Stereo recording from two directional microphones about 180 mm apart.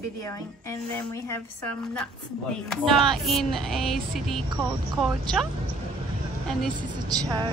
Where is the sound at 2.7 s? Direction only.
Centre (ahead or behind).